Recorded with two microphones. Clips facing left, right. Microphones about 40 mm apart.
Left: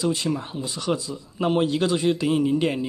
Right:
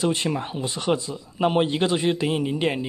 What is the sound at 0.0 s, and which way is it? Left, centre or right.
Speech, right.